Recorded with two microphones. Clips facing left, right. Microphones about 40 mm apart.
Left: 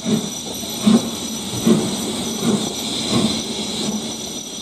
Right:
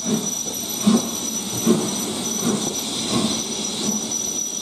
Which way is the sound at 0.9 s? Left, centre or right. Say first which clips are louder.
Left 3 dB; left.